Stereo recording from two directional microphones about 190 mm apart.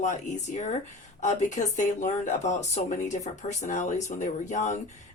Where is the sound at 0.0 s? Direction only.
40° left (ahead or behind).